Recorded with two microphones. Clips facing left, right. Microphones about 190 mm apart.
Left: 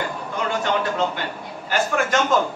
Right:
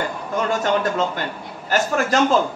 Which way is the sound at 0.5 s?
45° right (ahead or behind).